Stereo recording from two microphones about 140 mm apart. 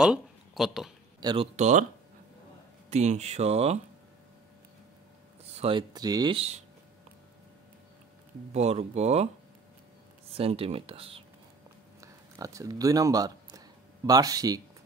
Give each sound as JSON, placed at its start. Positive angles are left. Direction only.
{"t": 0.0, "sound": "a sound", "side_deg": -5}
{"t": 1.2, "sound": "speech", "side_deg": -35}
{"t": 1.6, "sound": "speech", "side_deg": -60}
{"t": 2.9, "sound": "speech", "side_deg": -50}
{"t": 5.4, "sound": "speech", "side_deg": -45}
{"t": 6.3, "sound": "speech", "side_deg": -45}
{"t": 8.5, "sound": "speech", "side_deg": -50}
{"t": 10.3, "sound": "speech", "side_deg": -45}
{"t": 12.0, "sound": "a sound", "side_deg": -25}